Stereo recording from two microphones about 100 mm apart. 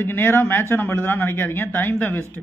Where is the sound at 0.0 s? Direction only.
20° left (ahead or behind).